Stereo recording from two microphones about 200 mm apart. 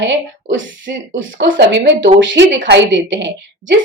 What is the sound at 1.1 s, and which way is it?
A woman's voice, 70° right (ahead or behind).